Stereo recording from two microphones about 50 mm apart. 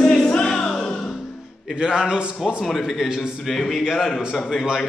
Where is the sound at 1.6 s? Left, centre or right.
Centre.